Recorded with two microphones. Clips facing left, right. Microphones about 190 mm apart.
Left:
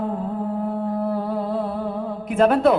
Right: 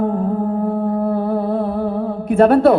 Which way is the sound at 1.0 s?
55° right (ahead or behind).